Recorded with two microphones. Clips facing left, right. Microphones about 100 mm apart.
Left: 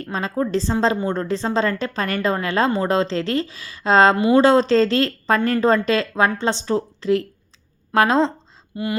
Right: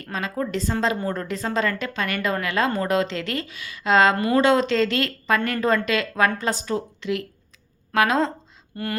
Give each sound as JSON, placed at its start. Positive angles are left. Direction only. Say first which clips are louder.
{"t": 0.0, "sound": "speech", "louder": "left 4 dB", "side_deg": 30}
{"t": 8.7, "sound": "speech", "louder": "left 4 dB", "side_deg": 15}